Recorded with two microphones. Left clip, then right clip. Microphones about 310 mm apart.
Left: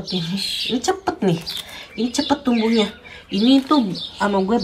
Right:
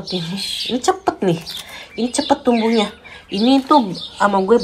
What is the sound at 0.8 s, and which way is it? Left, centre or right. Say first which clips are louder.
Speech: right 4 dB; centre.